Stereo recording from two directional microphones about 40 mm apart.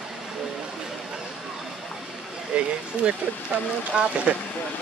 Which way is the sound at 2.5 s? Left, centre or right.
Right.